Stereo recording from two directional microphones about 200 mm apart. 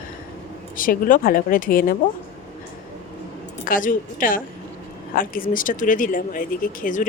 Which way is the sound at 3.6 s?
45° left (ahead or behind).